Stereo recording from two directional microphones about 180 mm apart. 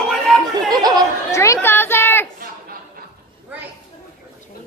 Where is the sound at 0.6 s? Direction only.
20° right (ahead or behind).